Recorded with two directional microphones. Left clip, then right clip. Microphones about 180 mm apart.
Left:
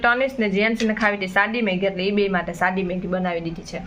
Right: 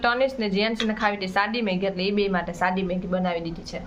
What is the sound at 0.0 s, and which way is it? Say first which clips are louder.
Speech: left 3 dB; 5° left (ahead or behind).